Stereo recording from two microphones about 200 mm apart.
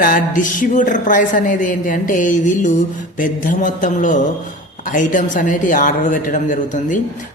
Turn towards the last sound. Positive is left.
turn(degrees=40)  # may be behind; listen again after turning